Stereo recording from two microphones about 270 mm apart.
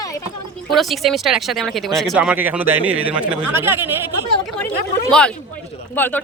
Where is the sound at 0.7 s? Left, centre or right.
Centre.